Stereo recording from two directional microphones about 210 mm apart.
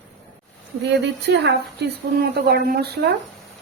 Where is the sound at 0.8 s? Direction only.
55° right (ahead or behind).